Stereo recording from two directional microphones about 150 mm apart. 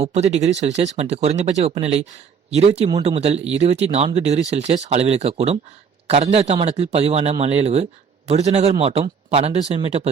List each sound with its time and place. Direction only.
0.0 s speech: 45° right (ahead or behind)